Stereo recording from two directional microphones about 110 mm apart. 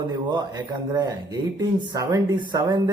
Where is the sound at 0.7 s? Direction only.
35° right (ahead or behind).